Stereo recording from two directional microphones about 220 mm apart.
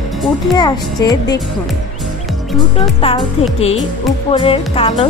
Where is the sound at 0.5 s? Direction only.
15° left (ahead or behind).